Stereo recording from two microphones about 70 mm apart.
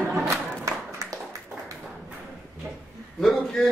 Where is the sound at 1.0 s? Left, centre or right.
Right.